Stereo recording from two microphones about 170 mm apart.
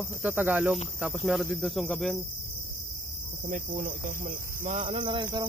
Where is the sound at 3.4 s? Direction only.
50° right (ahead or behind).